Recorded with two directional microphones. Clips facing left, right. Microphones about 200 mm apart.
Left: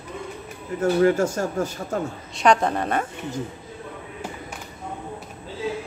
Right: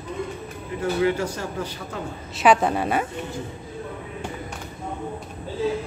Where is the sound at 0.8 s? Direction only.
45° left (ahead or behind).